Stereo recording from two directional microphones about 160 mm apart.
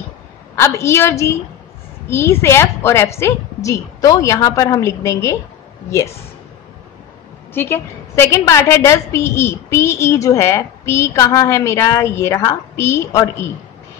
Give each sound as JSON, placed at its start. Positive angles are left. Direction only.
{"t": 0.6, "sound": "a woman's voice", "side_deg": 15}
{"t": 7.5, "sound": "a woman's voice", "side_deg": 15}